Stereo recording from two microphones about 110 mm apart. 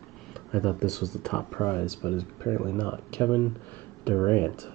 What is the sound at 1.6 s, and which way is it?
Speech, 20° left (ahead or behind).